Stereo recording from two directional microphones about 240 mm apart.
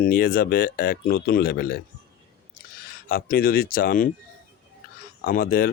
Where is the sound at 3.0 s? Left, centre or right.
Left.